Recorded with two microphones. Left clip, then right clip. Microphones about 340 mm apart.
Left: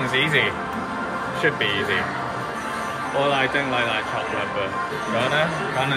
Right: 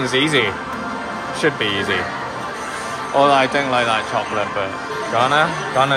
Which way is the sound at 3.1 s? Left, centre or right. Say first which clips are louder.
Right 7 dB; centre.